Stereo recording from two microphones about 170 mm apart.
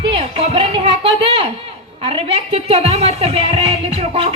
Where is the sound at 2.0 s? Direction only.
35° right (ahead or behind).